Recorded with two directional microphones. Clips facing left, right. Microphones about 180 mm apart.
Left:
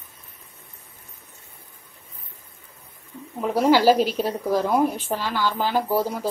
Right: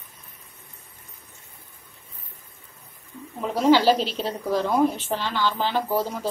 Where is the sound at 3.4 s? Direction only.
10° left (ahead or behind).